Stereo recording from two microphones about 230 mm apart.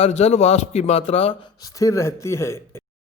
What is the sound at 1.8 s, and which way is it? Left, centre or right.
Speech, centre.